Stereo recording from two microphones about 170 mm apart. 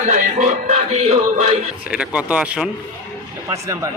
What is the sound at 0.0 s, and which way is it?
Music, 50° right (ahead or behind).